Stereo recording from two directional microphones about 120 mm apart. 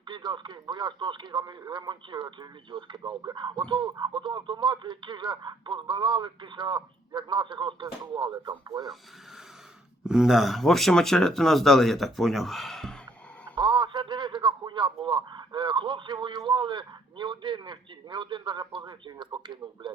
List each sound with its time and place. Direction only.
0.1 s speech: 40° right (ahead or behind)
10.1 s speech: 5° right (ahead or behind)
13.6 s a man's voice: 40° right (ahead or behind)